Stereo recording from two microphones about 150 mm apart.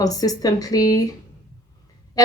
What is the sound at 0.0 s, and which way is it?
A woman's voice, 25° left (ahead or behind).